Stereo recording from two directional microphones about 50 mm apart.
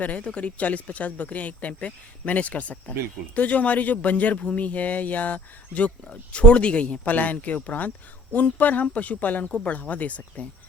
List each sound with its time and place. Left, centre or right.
0.0 s speech: left